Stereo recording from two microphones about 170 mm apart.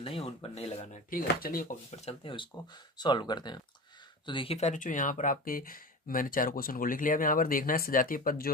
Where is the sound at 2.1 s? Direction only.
30° left (ahead or behind).